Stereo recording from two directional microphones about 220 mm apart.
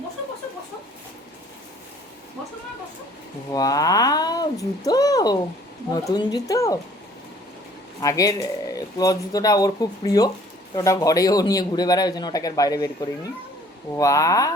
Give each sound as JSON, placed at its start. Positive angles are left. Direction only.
{"t": 3.5, "sound": "speech", "side_deg": 15}
{"t": 8.0, "sound": "speech", "side_deg": 15}